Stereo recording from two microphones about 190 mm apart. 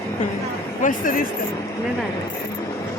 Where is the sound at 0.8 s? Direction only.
45° left (ahead or behind).